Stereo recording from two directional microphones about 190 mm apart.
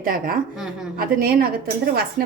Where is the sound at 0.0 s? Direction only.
50° right (ahead or behind).